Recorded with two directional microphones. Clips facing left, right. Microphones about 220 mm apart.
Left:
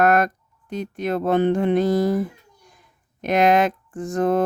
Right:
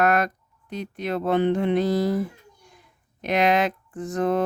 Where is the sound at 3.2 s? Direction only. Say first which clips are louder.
Left 4 dB; 50° left (ahead or behind).